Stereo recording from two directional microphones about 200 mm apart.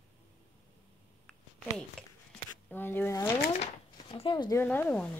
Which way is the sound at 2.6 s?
10° left (ahead or behind).